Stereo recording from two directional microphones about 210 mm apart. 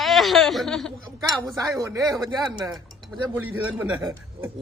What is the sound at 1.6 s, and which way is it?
A man's voice, 15° right (ahead or behind).